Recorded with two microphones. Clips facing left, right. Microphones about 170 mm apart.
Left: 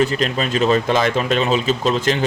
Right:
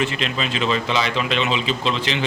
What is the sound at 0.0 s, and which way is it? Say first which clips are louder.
Speech: left 5 dB; 40° left (ahead or behind).